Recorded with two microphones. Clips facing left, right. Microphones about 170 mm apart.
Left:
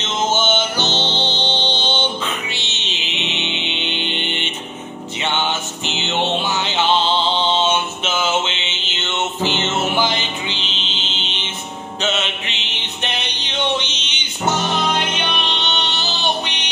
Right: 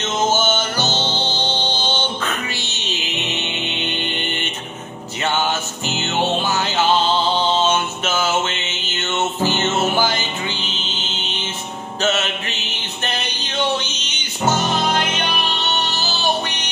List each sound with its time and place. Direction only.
0.3 s music: 40° right (ahead or behind)
1.0 s music: 10° right (ahead or behind)
3.3 s music: 45° right (ahead or behind)
8.8 s mantra: 45° right (ahead or behind)
9.4 s music: 45° right (ahead or behind)
12.0 s music: 40° right (ahead or behind)